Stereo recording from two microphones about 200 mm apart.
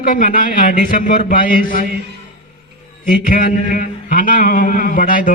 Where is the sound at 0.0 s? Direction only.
40° left (ahead or behind).